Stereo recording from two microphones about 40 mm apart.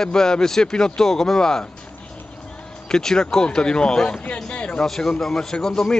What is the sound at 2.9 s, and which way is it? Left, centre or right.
Speech, centre.